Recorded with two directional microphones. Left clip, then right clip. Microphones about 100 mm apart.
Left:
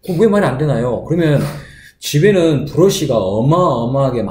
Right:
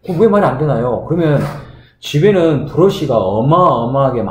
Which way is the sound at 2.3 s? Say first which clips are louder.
Right 1 dB; 15° left (ahead or behind).